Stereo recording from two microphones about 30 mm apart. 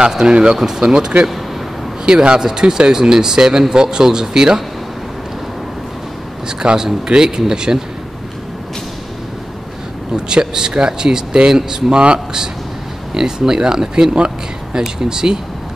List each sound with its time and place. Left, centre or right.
0.2 s speech: right
0.6 s speech: centre
6.6 s speech: right
10.1 s speech: right
13.1 s speech: right